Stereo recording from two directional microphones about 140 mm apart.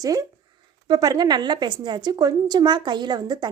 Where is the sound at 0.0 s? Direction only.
25° right (ahead or behind).